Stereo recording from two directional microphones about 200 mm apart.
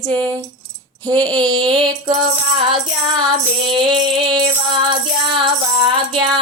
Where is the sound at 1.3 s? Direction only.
20° right (ahead or behind).